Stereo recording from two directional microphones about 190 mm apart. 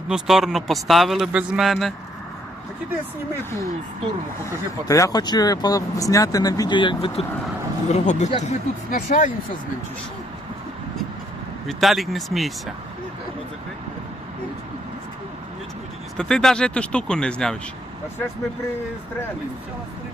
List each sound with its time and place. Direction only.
0.1 s a man's voice: centre (ahead or behind)
4.4 s speech: 15° left (ahead or behind)
7.9 s speech: 35° left (ahead or behind)
11.7 s a man's voice: centre (ahead or behind)
16.1 s a man's voice: 5° left (ahead or behind)